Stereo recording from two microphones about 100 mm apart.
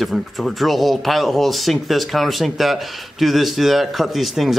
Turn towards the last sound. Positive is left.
turn(degrees=0)  # may be behind; listen again after turning